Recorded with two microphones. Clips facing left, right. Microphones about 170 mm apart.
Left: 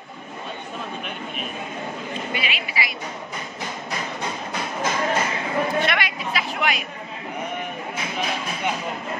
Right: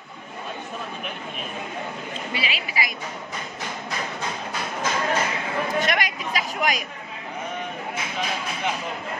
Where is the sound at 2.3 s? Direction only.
30° right (ahead or behind).